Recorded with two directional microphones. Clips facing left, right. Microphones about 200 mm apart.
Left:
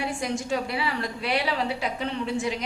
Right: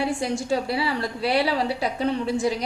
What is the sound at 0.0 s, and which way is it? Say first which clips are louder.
A woman's voice: right 4 dB; 30° right (ahead or behind).